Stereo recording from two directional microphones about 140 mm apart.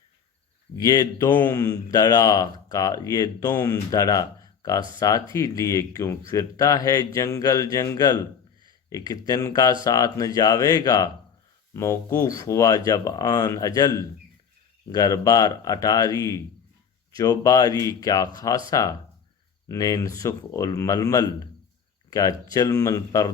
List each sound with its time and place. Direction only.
0.8 s speech: 25° left (ahead or behind)
1.3 s a man's voice: 15° left (ahead or behind)
1.5 s speech: 25° left (ahead or behind)